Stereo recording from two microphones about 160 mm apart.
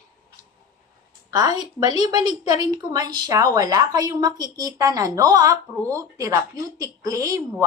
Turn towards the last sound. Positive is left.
turn(degrees=-20)  # may be behind; listen again after turning